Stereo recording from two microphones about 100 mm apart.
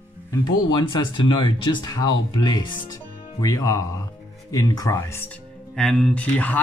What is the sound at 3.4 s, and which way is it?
Speech, 35° left (ahead or behind).